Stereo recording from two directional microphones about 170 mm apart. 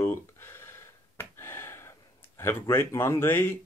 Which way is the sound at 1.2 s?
15° left (ahead or behind).